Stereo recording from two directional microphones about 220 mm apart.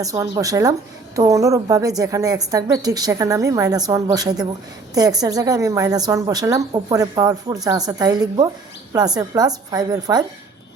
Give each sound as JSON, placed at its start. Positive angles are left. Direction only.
{"t": 0.0, "sound": "a woman's voice", "side_deg": -15}